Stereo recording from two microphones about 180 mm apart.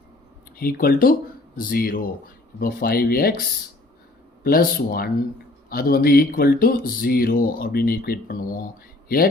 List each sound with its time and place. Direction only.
0.6 s speech: 55° left (ahead or behind)
4.4 s speech: 55° left (ahead or behind)